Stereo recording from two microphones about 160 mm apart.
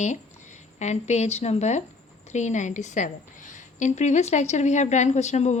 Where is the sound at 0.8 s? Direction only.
45° left (ahead or behind).